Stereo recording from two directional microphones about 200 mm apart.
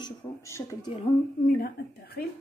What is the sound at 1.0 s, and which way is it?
A woman's voice, 45° left (ahead or behind).